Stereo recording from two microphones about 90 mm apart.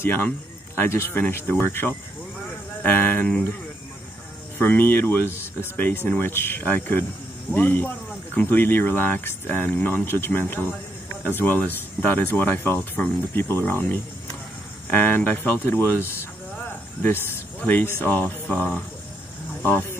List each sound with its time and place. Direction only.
0.0 s speech: 25° left (ahead or behind)
2.4 s a sound: 20° left (ahead or behind)
4.6 s speech: 25° left (ahead or behind)
16.5 s cricket: 20° left (ahead or behind)
18.0 s speech: 20° left (ahead or behind)
19.7 s speech: 25° left (ahead or behind)